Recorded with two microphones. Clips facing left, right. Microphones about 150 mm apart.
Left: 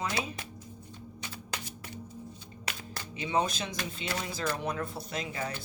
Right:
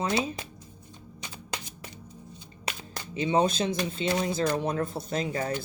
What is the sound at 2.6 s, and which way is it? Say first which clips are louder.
Speech: right 3 dB; 20° right (ahead or behind).